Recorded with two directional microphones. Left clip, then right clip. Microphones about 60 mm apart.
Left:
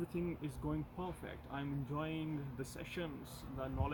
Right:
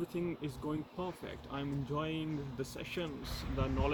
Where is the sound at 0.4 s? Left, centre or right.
Left.